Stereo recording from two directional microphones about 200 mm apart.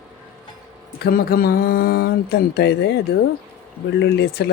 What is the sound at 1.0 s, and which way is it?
Speech, 50° left (ahead or behind).